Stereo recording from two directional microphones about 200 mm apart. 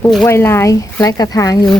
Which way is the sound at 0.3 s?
10° left (ahead or behind).